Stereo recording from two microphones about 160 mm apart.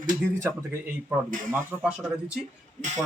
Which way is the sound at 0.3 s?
20° right (ahead or behind).